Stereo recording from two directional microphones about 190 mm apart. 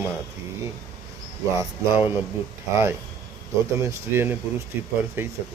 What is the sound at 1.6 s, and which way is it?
Speech, 10° right (ahead or behind).